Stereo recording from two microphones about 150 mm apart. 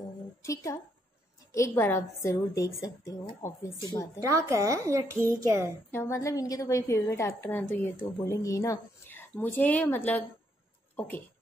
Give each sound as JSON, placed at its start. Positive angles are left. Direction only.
{"t": 0.4, "sound": "a woman's voice", "side_deg": 20}
{"t": 4.3, "sound": "a child's voice", "side_deg": -20}
{"t": 5.9, "sound": "a woman's voice", "side_deg": 20}